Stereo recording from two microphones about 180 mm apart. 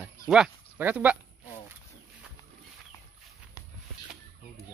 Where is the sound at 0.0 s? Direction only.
5° right (ahead or behind).